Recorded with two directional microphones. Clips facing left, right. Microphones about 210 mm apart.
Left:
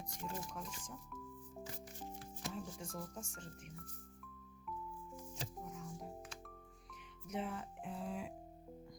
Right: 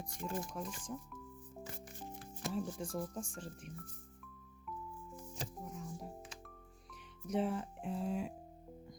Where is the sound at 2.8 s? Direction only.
30° right (ahead or behind).